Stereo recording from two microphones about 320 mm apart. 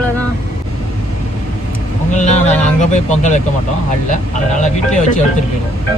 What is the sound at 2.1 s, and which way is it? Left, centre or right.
Speech, left.